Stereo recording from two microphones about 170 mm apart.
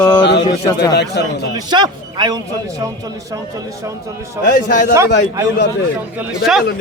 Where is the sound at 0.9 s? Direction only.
80° left.